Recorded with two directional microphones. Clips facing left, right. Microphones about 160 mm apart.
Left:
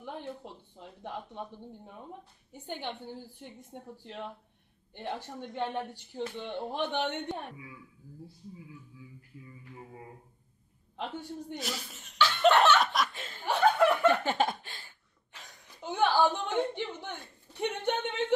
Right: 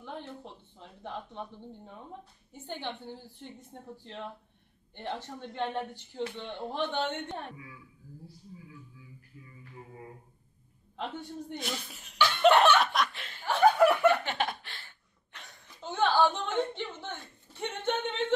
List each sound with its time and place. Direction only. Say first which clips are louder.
0.0 s speech: left 1 dB; 15° left (ahead or behind)
11.0 s speech: even; 5° left (ahead or behind)
12.2 s laughter: right 1 dB; 15° right (ahead or behind)
12.8 s laughter: right 1 dB; centre (ahead or behind)
13.6 s a sound: right 2 dB; 10° right (ahead or behind)
14.2 s a sound: left 4 dB; 45° left (ahead or behind)
15.8 s speech: even; 15° left (ahead or behind)